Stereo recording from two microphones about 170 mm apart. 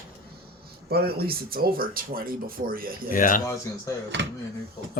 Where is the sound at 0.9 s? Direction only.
65° right (ahead or behind).